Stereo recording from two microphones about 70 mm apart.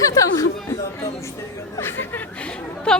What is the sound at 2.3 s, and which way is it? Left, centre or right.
Chatter, centre.